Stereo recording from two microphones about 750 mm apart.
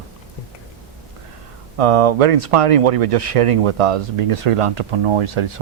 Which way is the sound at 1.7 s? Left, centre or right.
Right.